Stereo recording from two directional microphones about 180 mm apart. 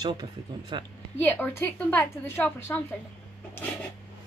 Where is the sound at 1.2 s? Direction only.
10° left (ahead or behind).